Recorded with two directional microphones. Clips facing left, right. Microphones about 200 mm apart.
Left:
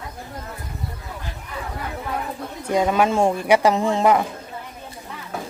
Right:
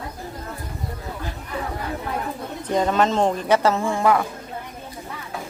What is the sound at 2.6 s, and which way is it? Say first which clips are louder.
Speech: left 1 dB; 10° left (ahead or behind).